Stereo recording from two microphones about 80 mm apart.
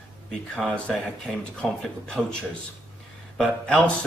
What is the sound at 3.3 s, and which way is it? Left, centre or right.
Speech, centre.